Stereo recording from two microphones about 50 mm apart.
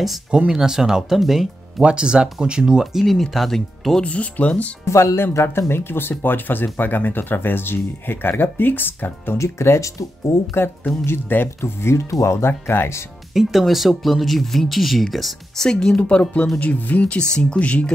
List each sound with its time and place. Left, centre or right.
0.5 s speech: centre
1.8 s speech: centre
3.1 s speech: centre
4.0 s speech: left
4.8 s speech: left
9.4 s speech: left
10.5 s speech: left
11.8 s speech: left
13.3 s speech: centre
16.0 s speech: left